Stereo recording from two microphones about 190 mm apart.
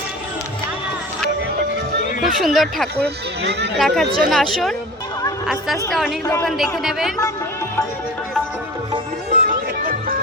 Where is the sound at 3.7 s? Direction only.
Centre (ahead or behind).